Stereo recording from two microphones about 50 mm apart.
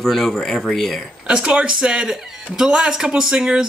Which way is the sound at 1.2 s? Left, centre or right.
Centre.